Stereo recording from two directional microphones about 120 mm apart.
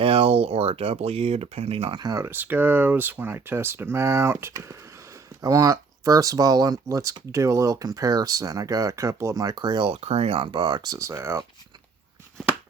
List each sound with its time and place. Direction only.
0.0 s speech: 50° right (ahead or behind)
2.0 s speech: 25° right (ahead or behind)
9.9 s speech: 60° right (ahead or behind); by 11.4 s 20° right (ahead or behind)